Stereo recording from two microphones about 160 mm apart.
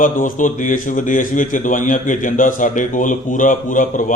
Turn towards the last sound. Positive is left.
turn(degrees=55)  # may be behind; listen again after turning